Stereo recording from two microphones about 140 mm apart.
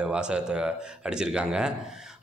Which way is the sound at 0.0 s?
5° right (ahead or behind).